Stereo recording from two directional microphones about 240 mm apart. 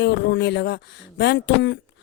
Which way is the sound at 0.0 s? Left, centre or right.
Left.